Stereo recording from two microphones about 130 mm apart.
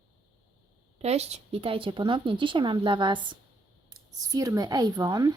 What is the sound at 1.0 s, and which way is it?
Speech, 55° right (ahead or behind).